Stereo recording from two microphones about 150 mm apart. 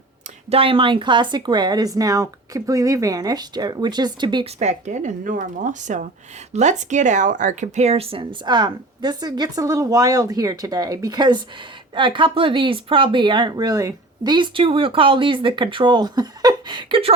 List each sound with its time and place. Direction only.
0.5 s speech: 35° right (ahead or behind)
4.6 s a woman's voice: 50° right (ahead or behind); by 17.1 s 35° right (ahead or behind)